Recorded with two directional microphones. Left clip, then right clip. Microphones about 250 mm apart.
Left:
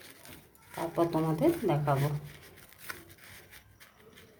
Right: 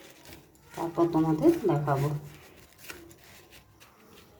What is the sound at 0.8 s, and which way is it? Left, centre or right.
Speech, left.